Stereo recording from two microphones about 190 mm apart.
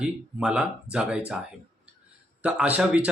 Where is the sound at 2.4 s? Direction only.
5° right (ahead or behind).